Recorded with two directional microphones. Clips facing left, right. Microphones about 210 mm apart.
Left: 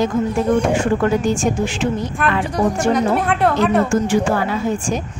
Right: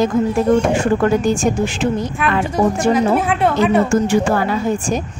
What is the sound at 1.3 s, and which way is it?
Speech, 40° right (ahead or behind).